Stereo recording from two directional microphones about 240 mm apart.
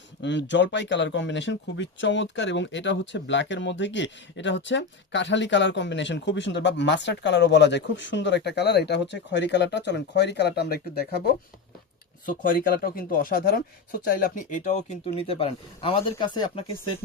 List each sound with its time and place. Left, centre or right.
0.2 s speech: left